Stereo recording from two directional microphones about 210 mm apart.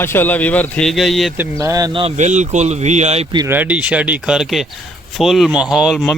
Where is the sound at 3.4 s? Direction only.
10° right (ahead or behind).